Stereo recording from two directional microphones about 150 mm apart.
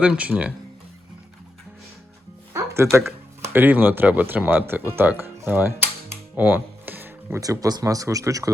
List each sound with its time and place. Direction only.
0.0 s speech: 10° right (ahead or behind)
2.5 s music: 20° right (ahead or behind)
2.9 s speech: centre (ahead or behind)
3.4 s speech: 15° right (ahead or behind)